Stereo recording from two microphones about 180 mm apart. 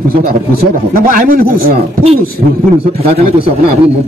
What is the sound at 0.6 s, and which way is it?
A man's voice, 55° right (ahead or behind).